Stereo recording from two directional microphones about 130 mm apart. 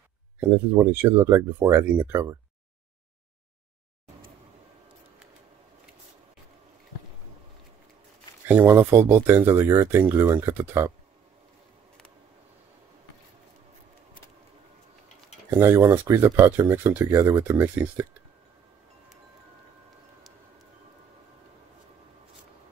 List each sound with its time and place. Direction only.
0.4 s speech: 15° right (ahead or behind)
8.5 s speech: 15° right (ahead or behind)
15.5 s speech: 20° right (ahead or behind)